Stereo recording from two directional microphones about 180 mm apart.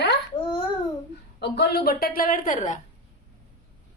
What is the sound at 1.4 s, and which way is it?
A woman's voice, 65° left (ahead or behind).